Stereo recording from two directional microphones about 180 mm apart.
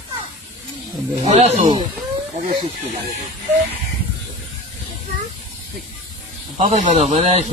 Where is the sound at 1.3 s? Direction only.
35° right (ahead or behind).